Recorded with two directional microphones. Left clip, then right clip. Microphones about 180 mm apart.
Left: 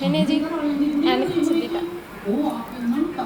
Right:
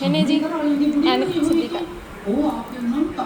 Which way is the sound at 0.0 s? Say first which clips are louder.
Right 2 dB; 5° right (ahead or behind).